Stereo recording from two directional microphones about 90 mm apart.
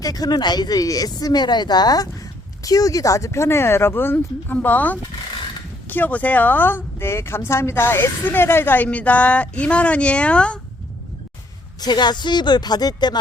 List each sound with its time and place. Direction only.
0.0 s speech: 45° left (ahead or behind); by 10.6 s 10° left (ahead or behind)
11.8 s speech: 55° left (ahead or behind)